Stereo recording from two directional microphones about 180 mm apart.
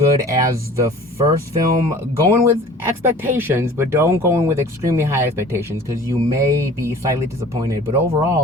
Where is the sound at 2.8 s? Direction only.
10° right (ahead or behind).